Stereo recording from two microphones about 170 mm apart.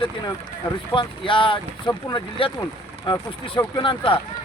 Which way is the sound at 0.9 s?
30° left (ahead or behind).